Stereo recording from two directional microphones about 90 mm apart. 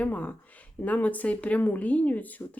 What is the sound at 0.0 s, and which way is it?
Speech, 15° left (ahead or behind).